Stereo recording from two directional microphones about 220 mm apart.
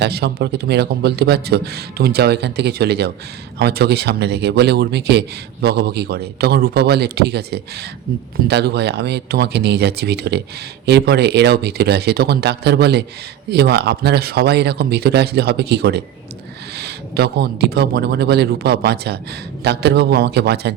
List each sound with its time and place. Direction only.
0.0 s a man's voice: 45° right (ahead or behind)